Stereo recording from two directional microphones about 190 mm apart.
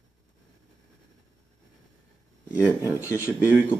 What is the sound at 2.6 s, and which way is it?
Speech, 15° right (ahead or behind).